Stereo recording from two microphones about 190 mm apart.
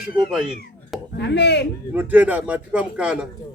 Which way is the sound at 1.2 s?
65° left (ahead or behind).